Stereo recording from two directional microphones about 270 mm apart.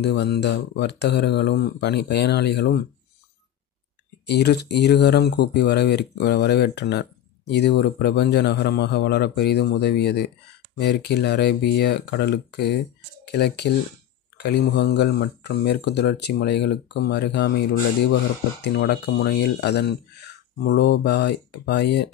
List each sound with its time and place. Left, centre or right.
0.0 s speech: left
4.3 s speech: left
18.6 s speech: left